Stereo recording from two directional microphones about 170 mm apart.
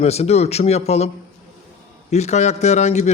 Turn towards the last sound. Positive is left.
turn(degrees=40)  # may be behind; listen again after turning